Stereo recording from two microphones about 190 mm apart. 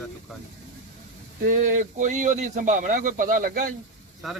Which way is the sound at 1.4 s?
45° right (ahead or behind).